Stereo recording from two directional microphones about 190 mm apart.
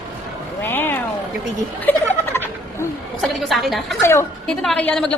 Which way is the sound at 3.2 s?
Centre (ahead or behind).